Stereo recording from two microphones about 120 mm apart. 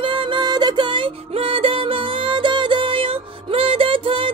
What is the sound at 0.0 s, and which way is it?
Music, 45° right (ahead or behind).